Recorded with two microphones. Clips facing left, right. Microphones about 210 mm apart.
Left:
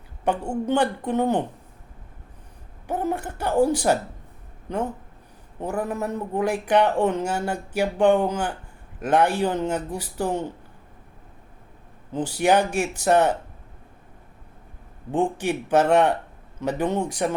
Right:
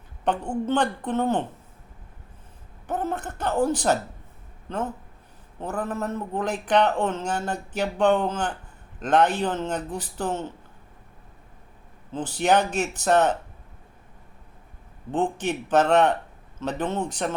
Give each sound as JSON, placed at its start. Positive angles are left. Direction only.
{"t": 0.3, "sound": "a man's voice", "side_deg": 10}
{"t": 2.8, "sound": "a woman's voice", "side_deg": 10}
{"t": 12.1, "sound": "a man's voice", "side_deg": 10}
{"t": 15.1, "sound": "a man's voice", "side_deg": 10}